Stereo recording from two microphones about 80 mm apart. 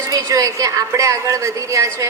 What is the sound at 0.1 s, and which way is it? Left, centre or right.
A woman's voice, right.